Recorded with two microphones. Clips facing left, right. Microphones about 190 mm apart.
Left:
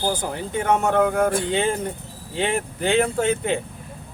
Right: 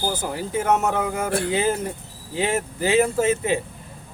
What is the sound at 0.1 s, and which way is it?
Speech, 5° right (ahead or behind).